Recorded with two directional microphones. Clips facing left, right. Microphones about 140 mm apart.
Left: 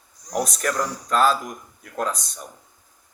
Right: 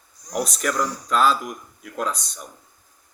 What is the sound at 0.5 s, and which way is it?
A man's voice, 45° left (ahead or behind).